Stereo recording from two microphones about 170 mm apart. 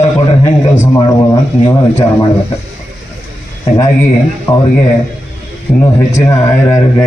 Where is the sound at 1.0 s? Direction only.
25° left (ahead or behind).